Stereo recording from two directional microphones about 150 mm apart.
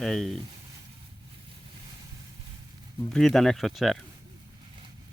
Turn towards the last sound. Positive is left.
turn(degrees=0)  # may be behind; listen again after turning